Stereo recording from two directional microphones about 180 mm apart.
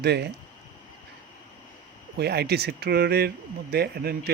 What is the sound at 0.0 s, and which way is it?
Speech, 65° right (ahead or behind).